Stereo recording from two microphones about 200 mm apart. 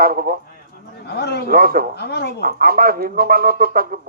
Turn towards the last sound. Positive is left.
turn(degrees=-45)  # may be behind; listen again after turning